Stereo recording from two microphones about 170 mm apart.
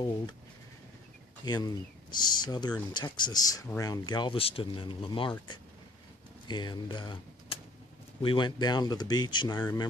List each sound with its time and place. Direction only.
1.4 s speech: 25° left (ahead or behind)